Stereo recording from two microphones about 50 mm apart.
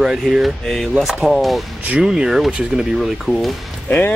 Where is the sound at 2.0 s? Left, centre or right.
Centre.